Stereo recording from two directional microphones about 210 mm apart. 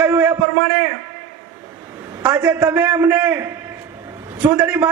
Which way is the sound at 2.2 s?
15° right (ahead or behind).